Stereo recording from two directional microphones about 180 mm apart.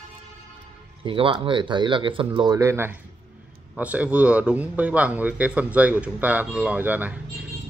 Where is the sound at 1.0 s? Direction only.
30° right (ahead or behind).